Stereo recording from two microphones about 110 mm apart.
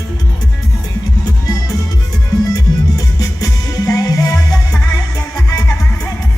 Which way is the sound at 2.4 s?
35° left (ahead or behind).